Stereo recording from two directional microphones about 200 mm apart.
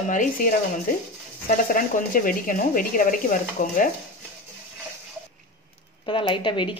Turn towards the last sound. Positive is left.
turn(degrees=25)  # may be behind; listen again after turning